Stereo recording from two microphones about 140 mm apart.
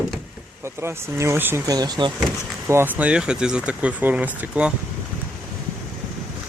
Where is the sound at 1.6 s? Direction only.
30° right (ahead or behind).